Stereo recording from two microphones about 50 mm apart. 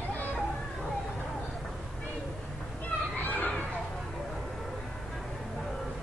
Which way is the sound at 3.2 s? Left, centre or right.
Left.